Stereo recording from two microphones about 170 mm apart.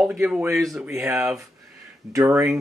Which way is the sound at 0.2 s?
10° right (ahead or behind).